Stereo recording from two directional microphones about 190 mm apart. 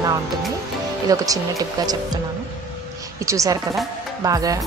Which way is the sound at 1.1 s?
20° right (ahead or behind).